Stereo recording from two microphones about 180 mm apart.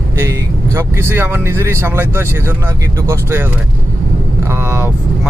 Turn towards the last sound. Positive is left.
turn(degrees=-10)  # may be behind; listen again after turning